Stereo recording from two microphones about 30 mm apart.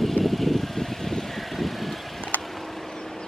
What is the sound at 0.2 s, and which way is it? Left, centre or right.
Vehicle, centre.